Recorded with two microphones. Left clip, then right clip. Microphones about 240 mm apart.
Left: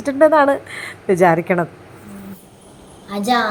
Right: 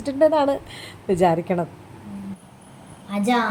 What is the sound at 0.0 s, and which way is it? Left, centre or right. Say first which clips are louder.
Speech: left 6 dB; centre.